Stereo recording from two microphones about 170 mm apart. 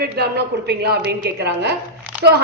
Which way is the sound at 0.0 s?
70° right (ahead or behind).